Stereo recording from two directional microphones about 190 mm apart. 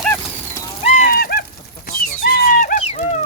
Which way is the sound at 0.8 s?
35° left (ahead or behind).